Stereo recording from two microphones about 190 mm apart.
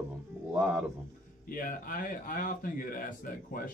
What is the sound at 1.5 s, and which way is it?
A man's voice, 45° left (ahead or behind).